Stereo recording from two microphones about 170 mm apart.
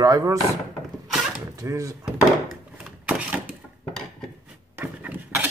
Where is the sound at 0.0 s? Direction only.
20° right (ahead or behind).